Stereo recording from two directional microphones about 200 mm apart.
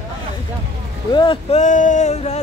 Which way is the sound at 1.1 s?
25° left (ahead or behind).